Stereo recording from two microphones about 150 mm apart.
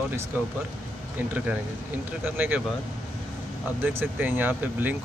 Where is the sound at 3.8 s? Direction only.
15° right (ahead or behind).